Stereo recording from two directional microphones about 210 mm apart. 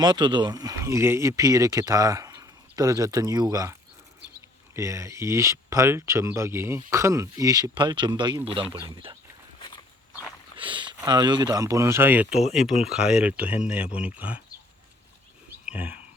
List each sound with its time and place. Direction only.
0.0 s speech: 20° right (ahead or behind)
9.6 s walk: 20° left (ahead or behind)
10.6 s speech: 20° right (ahead or behind); by 14.4 s 5° right (ahead or behind)
15.6 s speech: 5° right (ahead or behind)